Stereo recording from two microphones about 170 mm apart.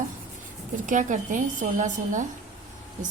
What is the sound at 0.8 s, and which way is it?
Speech, 50° right (ahead or behind).